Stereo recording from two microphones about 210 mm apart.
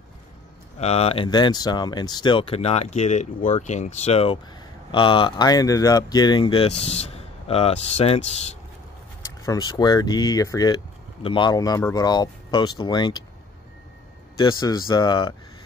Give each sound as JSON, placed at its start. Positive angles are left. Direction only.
{"t": 0.7, "sound": "speech", "side_deg": 30}
{"t": 9.4, "sound": "speech", "side_deg": 15}
{"t": 14.6, "sound": "speech", "side_deg": 20}